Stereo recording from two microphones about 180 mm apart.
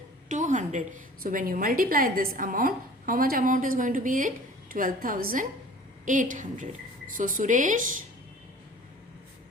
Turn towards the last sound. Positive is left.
turn(degrees=-45)  # may be behind; listen again after turning